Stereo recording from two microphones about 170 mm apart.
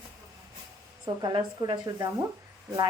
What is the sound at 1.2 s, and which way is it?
Speech, 25° right (ahead or behind).